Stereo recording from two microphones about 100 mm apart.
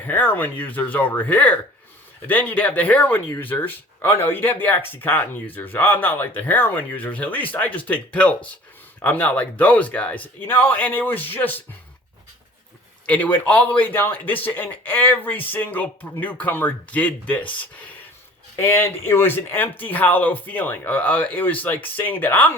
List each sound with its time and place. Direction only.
0.0 s speech: 20° left (ahead or behind)
13.1 s speech: 15° left (ahead or behind)
18.5 s speech: 25° left (ahead or behind)